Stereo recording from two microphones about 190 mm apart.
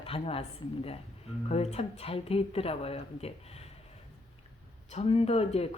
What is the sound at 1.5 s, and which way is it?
Speech, 35° left (ahead or behind).